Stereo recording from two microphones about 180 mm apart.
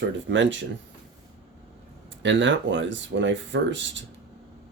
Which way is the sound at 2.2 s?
90° right.